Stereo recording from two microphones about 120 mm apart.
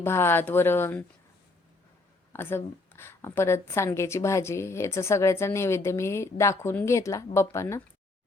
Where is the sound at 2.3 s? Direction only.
20° left (ahead or behind).